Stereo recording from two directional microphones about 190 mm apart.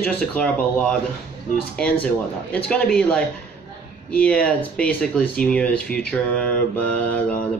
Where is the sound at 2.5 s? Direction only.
5° left (ahead or behind).